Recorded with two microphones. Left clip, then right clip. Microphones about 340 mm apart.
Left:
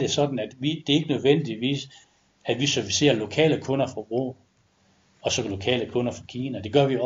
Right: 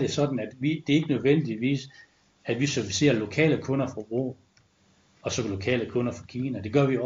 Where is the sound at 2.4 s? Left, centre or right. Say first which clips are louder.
Left 3 dB; left.